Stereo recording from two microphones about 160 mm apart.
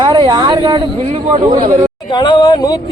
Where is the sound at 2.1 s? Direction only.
30° left (ahead or behind).